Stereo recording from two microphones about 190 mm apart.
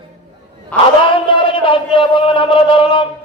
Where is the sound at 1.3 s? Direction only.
25° left (ahead or behind).